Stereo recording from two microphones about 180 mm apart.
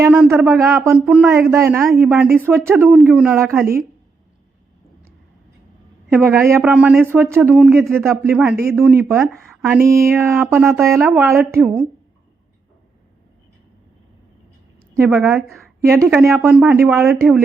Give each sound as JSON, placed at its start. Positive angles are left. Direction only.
{"t": 0.0, "sound": "a woman's voice", "side_deg": -10}
{"t": 0.4, "sound": "speech", "side_deg": 0}
{"t": 1.5, "sound": "a woman's voice", "side_deg": -15}
{"t": 1.8, "sound": "speech", "side_deg": 0}
{"t": 2.5, "sound": "a woman's voice", "side_deg": -15}
{"t": 2.8, "sound": "speech", "side_deg": 0}
{"t": 6.1, "sound": "a woman's voice", "side_deg": -10}
{"t": 10.6, "sound": "a woman's voice", "side_deg": 0}
{"t": 14.9, "sound": "a woman's voice", "side_deg": -10}
{"t": 15.4, "sound": "speech", "side_deg": 0}
{"t": 15.8, "sound": "a woman's voice", "side_deg": -15}